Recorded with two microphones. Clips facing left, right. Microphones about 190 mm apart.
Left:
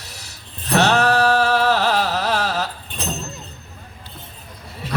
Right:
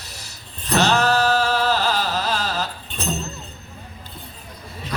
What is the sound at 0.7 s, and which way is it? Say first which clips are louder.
Music: left 2 dB; 65° left (ahead or behind).